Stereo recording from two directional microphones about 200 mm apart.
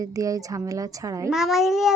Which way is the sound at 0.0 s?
15° right (ahead or behind).